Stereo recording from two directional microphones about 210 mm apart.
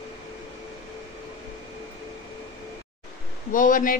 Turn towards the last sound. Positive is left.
turn(degrees=40)  # may be behind; listen again after turning